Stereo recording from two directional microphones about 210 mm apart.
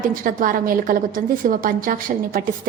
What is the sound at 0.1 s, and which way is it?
A woman's voice, 40° right (ahead or behind).